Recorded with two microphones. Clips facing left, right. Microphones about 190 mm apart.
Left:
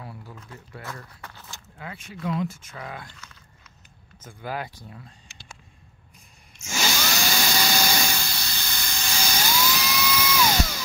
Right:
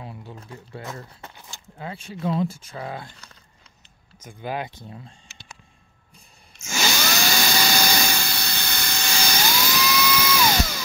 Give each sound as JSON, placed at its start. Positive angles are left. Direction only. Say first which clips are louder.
{"t": 0.0, "sound": "speech", "louder": "right 3 dB", "side_deg": -25}
{"t": 4.2, "sound": "speech", "louder": "right 3 dB", "side_deg": -20}
{"t": 6.7, "sound": "tools", "louder": "right 2 dB", "side_deg": -80}